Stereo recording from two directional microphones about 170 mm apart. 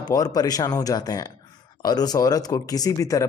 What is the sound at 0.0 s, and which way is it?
Speech, 20° left (ahead or behind).